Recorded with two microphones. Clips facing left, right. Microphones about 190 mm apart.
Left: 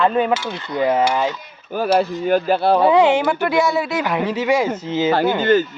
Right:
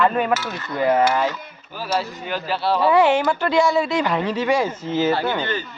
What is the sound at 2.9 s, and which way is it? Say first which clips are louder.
Speech: right 1 dB; 15° left (ahead or behind).